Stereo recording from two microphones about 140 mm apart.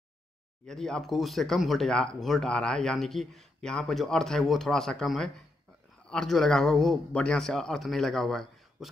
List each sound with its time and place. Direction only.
0.7 s a man's voice: 5° left (ahead or behind)